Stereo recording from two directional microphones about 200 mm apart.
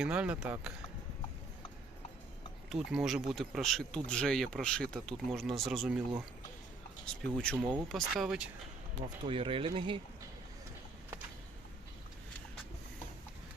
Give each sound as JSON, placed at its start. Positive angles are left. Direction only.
{"t": 0.0, "sound": "speech", "side_deg": -5}
{"t": 2.6, "sound": "speech", "side_deg": 0}
{"t": 7.0, "sound": "speech", "side_deg": 5}
{"t": 9.2, "sound": "speech", "side_deg": -25}